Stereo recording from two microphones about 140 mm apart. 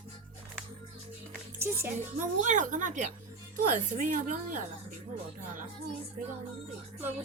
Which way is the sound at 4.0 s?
70° right (ahead or behind).